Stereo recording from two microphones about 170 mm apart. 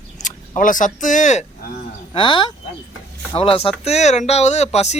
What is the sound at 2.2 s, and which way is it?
Speech, 30° left (ahead or behind).